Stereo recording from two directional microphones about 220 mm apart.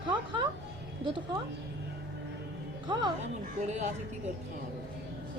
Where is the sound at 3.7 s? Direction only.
30° right (ahead or behind).